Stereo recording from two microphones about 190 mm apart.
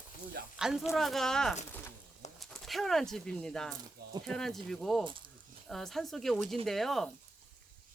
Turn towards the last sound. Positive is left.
turn(degrees=0)  # may be behind; listen again after turning